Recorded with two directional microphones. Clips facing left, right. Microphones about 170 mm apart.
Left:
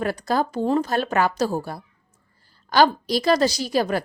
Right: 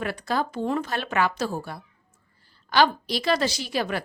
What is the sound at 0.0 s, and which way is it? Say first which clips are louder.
A woman's voice: left 4 dB; 40° left (ahead or behind).